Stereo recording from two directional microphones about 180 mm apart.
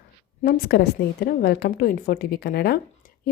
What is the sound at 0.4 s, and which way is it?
A woman's voice, 55° left (ahead or behind).